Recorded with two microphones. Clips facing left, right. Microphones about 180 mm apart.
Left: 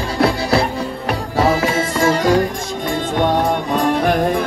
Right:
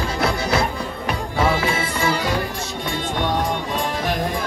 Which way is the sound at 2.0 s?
45° left (ahead or behind).